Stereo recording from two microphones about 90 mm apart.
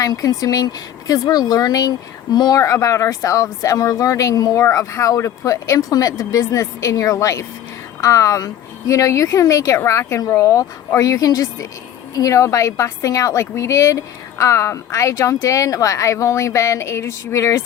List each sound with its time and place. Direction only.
0.0 s a woman's voice: 40° left (ahead or behind)